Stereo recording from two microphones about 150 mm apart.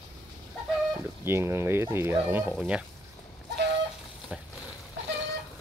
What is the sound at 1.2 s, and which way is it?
Speech, 15° right (ahead or behind).